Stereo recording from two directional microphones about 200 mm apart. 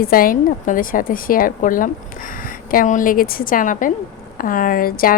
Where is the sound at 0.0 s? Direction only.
45° left (ahead or behind).